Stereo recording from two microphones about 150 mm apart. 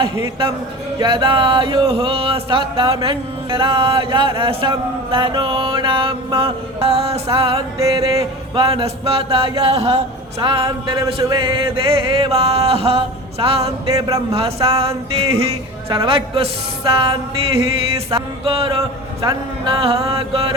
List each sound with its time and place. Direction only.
0.0 s music: 30° right (ahead or behind)
7.8 s music: 20° right (ahead or behind)
8.5 s music: 35° right (ahead or behind)
13.8 s music: 20° right (ahead or behind)
14.3 s music: 40° right (ahead or behind)